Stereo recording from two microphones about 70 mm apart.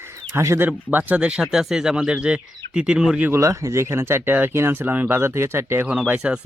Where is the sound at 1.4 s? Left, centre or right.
Centre.